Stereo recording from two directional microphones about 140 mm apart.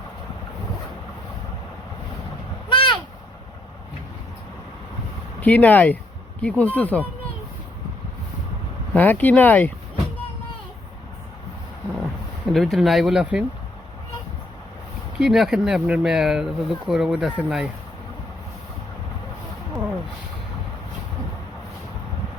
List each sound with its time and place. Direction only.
2.6 s a sound: 35° left (ahead or behind)
5.4 s speech: 10° left (ahead or behind)
8.9 s speech: 10° left (ahead or behind)
12.5 s speech: centre (ahead or behind)
15.2 s speech: 5° right (ahead or behind)